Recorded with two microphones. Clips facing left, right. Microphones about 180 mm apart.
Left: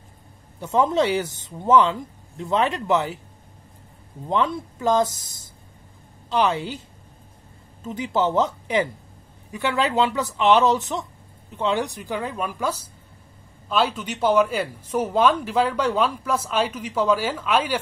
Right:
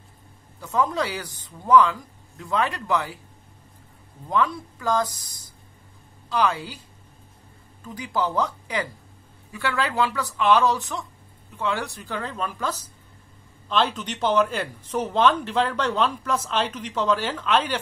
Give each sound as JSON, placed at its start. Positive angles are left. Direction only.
{"t": 0.6, "sound": "speech", "side_deg": 25}
{"t": 4.3, "sound": "speech", "side_deg": 25}
{"t": 7.8, "sound": "speech", "side_deg": 25}